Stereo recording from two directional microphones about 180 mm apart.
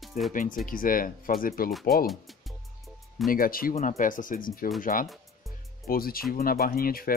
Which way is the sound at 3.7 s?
40° left (ahead or behind).